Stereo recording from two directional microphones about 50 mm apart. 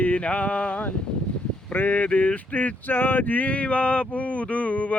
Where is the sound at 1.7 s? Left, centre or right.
Left.